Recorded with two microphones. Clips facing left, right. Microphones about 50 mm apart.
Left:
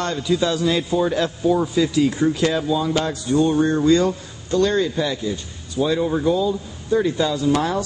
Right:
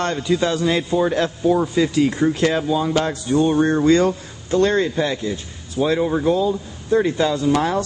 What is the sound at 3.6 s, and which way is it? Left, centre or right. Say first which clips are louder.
Speech: right 1 dB; right.